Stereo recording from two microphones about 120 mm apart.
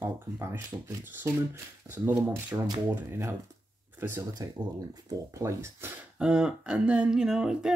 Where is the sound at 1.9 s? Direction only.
20° right (ahead or behind).